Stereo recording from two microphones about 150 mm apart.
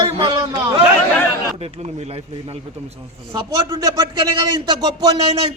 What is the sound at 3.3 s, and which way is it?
A man's voice, 25° right (ahead or behind).